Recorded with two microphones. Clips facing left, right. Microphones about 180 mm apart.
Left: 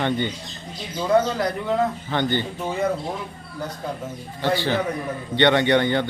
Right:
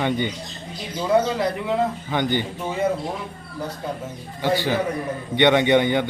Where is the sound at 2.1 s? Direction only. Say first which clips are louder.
Even; 15° right (ahead or behind).